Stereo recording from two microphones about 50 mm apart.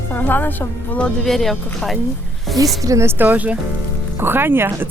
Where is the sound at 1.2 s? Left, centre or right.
Centre.